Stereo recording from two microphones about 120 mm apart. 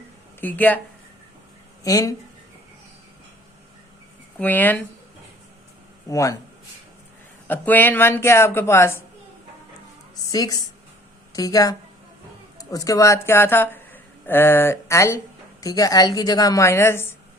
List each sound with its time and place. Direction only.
0.4 s speech: 15° left (ahead or behind)
1.8 s speech: 30° left (ahead or behind)
4.4 s speech: 15° left (ahead or behind)
6.1 s speech: 30° left (ahead or behind)
7.4 s speech: 15° left (ahead or behind)
10.3 s a woman's voice: 30° left (ahead or behind)